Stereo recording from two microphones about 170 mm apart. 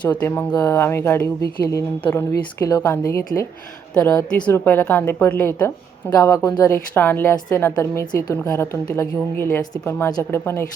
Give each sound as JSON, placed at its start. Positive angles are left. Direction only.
{"t": 0.2, "sound": "a woman's voice", "side_deg": 15}
{"t": 3.9, "sound": "a woman's voice", "side_deg": 5}